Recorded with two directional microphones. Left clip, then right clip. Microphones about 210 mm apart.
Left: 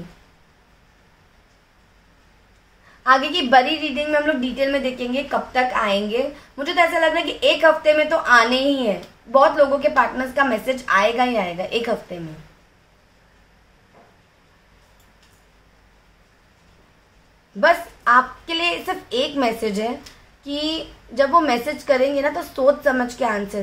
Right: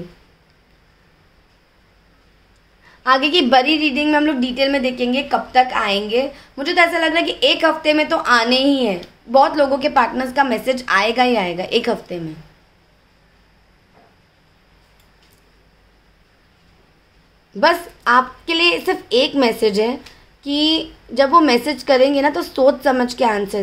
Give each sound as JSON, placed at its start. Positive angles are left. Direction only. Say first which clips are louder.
{"t": 3.0, "sound": "a woman's voice", "louder": "right 2 dB", "side_deg": -50}
{"t": 17.6, "sound": "a woman's voice", "louder": "right 1 dB", "side_deg": -45}